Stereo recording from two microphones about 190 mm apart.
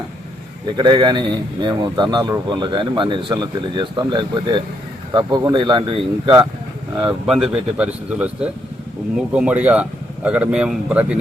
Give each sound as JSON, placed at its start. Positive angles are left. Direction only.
{"t": 0.8, "sound": "speech", "side_deg": -25}
{"t": 7.0, "sound": "speech", "side_deg": -5}